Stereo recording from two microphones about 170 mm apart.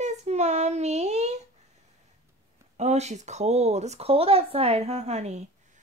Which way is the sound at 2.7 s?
40° right (ahead or behind).